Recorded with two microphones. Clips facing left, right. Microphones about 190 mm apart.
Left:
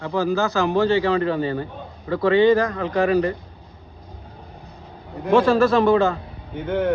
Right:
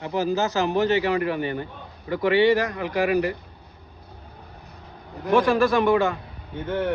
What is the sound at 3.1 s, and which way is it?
Speech, 30° left (ahead or behind).